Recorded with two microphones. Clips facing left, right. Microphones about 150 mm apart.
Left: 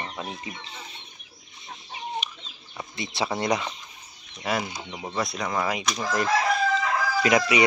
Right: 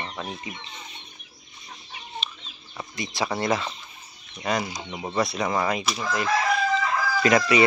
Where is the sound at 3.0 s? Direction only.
25° left (ahead or behind).